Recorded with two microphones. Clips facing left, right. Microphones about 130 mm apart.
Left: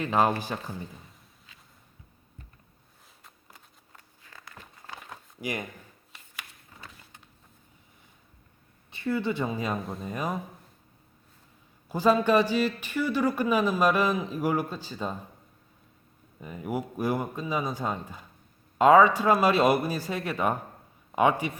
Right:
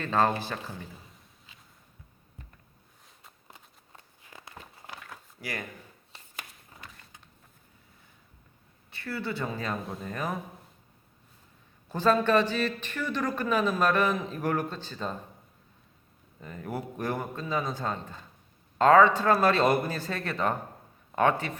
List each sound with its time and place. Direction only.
0.0 s a man's voice: 15° left (ahead or behind)
3.5 s a sound: 20° right (ahead or behind)
5.0 s a sound: 20° left (ahead or behind)
8.9 s speech: 20° left (ahead or behind)
9.8 s speech: centre (ahead or behind)
10.1 s a man's voice: 15° left (ahead or behind)
11.9 s a man's voice: 10° left (ahead or behind)
16.4 s a man's voice: 10° left (ahead or behind)